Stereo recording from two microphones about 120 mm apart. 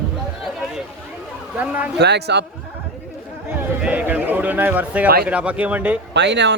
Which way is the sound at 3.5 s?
10° right (ahead or behind).